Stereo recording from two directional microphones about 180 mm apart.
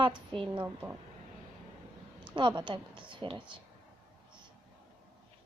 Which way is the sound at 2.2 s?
25° right (ahead or behind).